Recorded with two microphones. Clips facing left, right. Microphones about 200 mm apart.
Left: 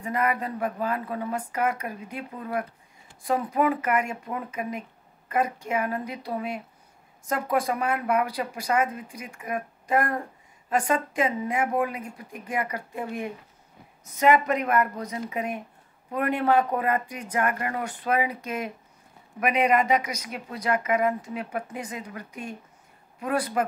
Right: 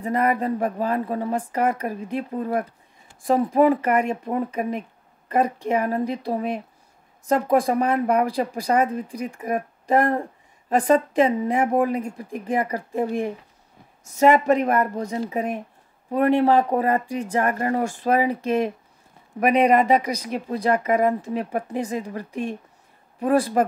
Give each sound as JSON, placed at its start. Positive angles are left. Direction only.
{"t": 0.0, "sound": "speech", "side_deg": -35}